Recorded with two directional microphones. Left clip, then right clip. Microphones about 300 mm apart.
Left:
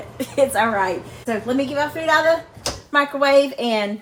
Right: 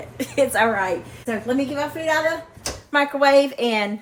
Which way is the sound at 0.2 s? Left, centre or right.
Centre.